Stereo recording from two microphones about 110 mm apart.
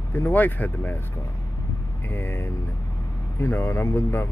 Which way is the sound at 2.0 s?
20° left (ahead or behind).